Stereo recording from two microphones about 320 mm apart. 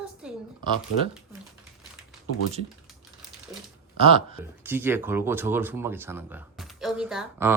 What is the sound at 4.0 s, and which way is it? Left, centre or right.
Speech, centre.